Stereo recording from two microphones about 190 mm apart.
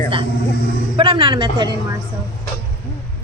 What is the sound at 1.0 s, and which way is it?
Speech, 25° right (ahead or behind).